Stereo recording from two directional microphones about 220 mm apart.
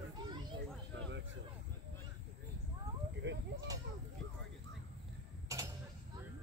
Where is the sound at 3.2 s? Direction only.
55° right (ahead or behind).